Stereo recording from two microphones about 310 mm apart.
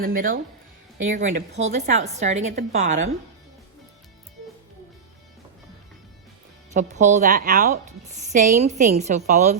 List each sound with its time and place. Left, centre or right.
0.0 s a woman's voice: right
6.7 s a woman's voice: right